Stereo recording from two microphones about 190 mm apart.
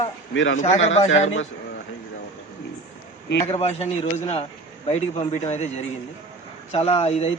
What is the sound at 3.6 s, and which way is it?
Speech, 35° left (ahead or behind).